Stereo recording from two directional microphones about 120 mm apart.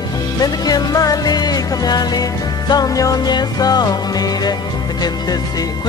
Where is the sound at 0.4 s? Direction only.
30° left (ahead or behind).